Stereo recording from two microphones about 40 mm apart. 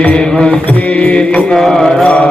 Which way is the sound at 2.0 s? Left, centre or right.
Left.